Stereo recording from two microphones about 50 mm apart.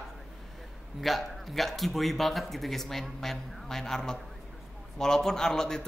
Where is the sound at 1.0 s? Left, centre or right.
Centre.